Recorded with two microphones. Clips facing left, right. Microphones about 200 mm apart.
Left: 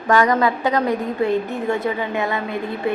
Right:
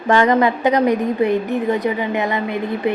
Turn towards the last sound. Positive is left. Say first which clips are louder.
# right 3 dB
turn(degrees=-20)  # may be behind; listen again after turning